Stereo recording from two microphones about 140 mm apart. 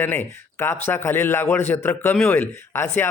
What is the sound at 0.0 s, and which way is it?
Speech, 15° left (ahead or behind).